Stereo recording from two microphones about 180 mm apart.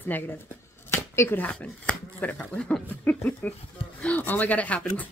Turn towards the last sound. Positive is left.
turn(degrees=10)  # may be behind; listen again after turning